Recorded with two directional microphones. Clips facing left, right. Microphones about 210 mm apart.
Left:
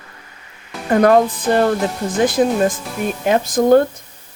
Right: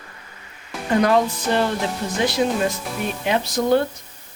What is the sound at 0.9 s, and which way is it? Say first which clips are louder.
Speech: left 5 dB; 50° left (ahead or behind).